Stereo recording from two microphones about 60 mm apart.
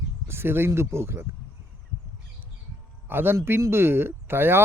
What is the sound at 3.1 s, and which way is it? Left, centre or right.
Speech, right.